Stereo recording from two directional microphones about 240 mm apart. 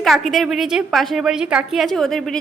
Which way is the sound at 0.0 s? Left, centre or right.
Centre.